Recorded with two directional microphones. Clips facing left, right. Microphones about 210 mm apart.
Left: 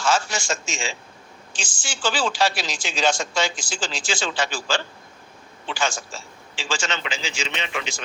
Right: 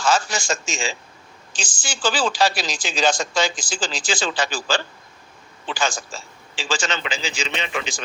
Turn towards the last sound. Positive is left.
turn(degrees=-35)  # may be behind; listen again after turning